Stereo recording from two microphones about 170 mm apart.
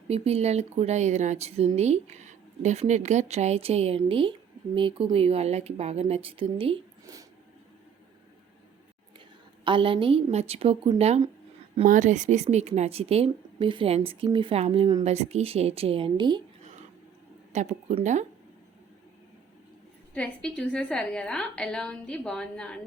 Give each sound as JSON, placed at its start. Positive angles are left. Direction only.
{"t": 0.1, "sound": "speech", "side_deg": -35}
{"t": 9.6, "sound": "speech", "side_deg": -30}
{"t": 15.0, "sound": "speech", "side_deg": -40}
{"t": 17.5, "sound": "speech", "side_deg": -45}
{"t": 20.1, "sound": "a woman's voice", "side_deg": 5}